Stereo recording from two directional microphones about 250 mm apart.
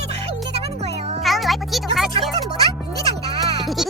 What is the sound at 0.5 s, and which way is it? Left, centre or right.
Music, right.